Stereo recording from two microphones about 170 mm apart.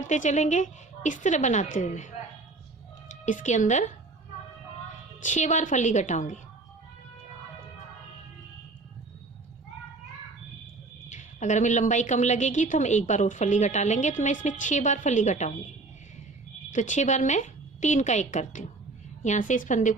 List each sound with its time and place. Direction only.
0.0 s a woman's voice: 45° left (ahead or behind)
5.2 s a woman's voice: 45° left (ahead or behind)
11.1 s a woman's voice: 45° left (ahead or behind)
16.7 s a woman's voice: 45° left (ahead or behind)